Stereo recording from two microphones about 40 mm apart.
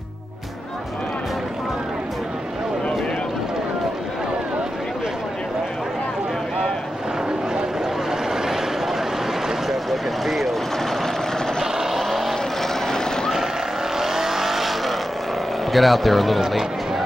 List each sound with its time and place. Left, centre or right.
8.3 s a sound: centre
9.7 s vehicle: centre
11.6 s vehicle: centre
12.8 s vehicle: centre
13.9 s vehicle: centre
15.7 s speech: centre
16.3 s speech: centre